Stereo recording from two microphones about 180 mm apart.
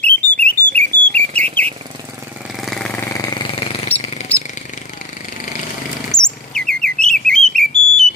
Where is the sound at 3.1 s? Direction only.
25° left (ahead or behind).